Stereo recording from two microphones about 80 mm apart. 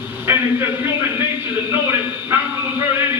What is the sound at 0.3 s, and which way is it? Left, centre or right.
Speech, right.